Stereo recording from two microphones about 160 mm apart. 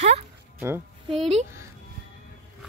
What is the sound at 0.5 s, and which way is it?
Speech, 15° right (ahead or behind).